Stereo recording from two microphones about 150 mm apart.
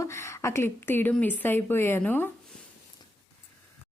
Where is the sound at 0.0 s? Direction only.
20° left (ahead or behind).